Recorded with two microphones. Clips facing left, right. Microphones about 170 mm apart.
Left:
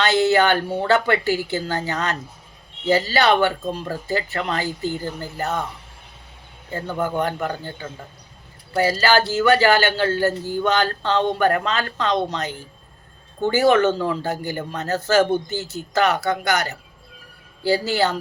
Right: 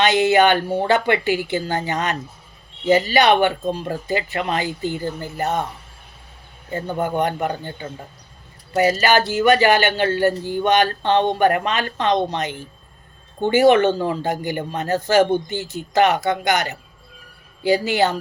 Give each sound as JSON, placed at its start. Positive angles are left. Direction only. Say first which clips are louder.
{"t": 0.0, "sound": "speech", "louder": "right 2 dB", "side_deg": -15}
{"t": 6.7, "sound": "speech", "louder": "right 2 dB", "side_deg": -20}